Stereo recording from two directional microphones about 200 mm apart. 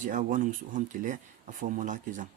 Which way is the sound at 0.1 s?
40° right (ahead or behind).